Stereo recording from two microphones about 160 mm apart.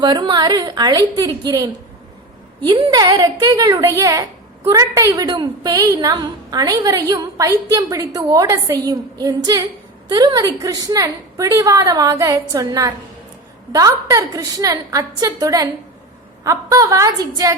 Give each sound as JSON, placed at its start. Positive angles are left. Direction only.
{"t": 0.0, "sound": "a woman's voice", "side_deg": -30}